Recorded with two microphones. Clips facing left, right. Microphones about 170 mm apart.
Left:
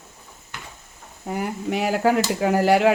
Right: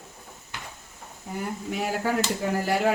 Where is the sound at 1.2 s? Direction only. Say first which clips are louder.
Left 6 dB; 80° left.